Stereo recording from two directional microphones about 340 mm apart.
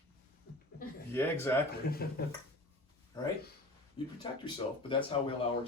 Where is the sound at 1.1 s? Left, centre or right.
Centre.